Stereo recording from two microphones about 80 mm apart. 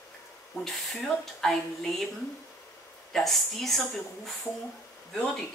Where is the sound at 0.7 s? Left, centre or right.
Centre.